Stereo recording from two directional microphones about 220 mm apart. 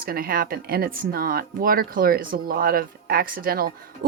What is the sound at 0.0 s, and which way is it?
Speech, 40° right (ahead or behind).